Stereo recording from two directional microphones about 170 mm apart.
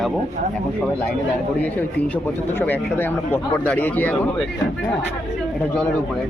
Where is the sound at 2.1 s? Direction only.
10° left (ahead or behind).